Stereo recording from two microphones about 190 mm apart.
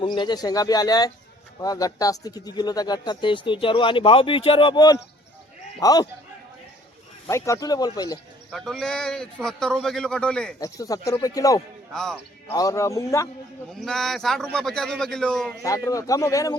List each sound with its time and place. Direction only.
0.0 s speech: 25° left (ahead or behind)
7.3 s speech: 15° left (ahead or behind)
8.4 s a man's voice: centre (ahead or behind)
10.6 s speech: 20° left (ahead or behind)
11.9 s speech: 5° left (ahead or behind)
12.5 s speech: 15° left (ahead or behind)
13.7 s a man's voice: centre (ahead or behind)
15.6 s speech: 15° left (ahead or behind)